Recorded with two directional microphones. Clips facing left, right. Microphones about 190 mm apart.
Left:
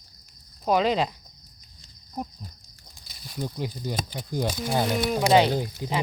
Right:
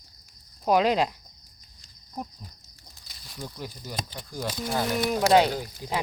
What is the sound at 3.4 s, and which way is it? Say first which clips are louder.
Speech: left 7 dB; 20° left (ahead or behind).